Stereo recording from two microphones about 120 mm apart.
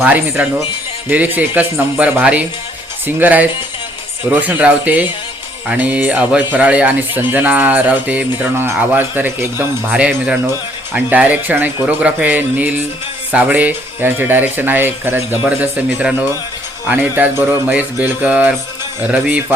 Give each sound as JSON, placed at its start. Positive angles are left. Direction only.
{"t": 0.0, "sound": "speech", "side_deg": -15}